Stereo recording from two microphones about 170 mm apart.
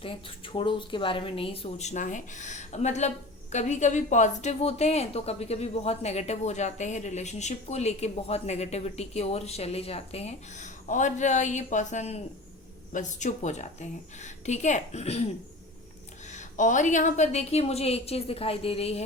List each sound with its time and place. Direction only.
0.0 s a woman's voice: 30° left (ahead or behind)
16.3 s a woman's voice: 45° left (ahead or behind)